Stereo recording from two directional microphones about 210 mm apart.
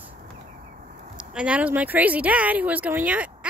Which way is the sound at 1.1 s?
5° right (ahead or behind).